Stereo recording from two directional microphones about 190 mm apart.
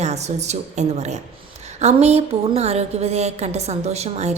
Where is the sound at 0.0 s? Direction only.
35° right (ahead or behind).